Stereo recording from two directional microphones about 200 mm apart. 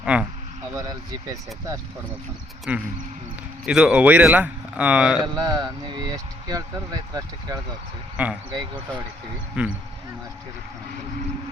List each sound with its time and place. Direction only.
0.0 s speech: 5° right (ahead or behind)
0.8 s speech: 15° right (ahead or behind)
2.7 s speech: 5° right (ahead or behind)
5.2 s speech: 20° right (ahead or behind)
8.1 s speech: 5° right (ahead or behind)
9.6 s speech: 5° right (ahead or behind)